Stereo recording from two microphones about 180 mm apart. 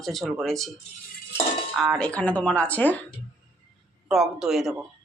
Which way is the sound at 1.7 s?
Centre (ahead or behind).